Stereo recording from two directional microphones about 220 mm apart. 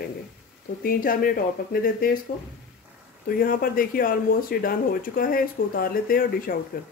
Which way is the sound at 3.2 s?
40° left (ahead or behind).